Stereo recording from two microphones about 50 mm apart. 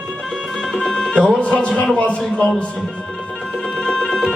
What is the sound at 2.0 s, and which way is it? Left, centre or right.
Speech, left.